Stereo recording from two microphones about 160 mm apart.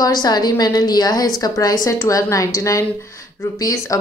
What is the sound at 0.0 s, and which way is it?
A woman's voice, 25° left (ahead or behind).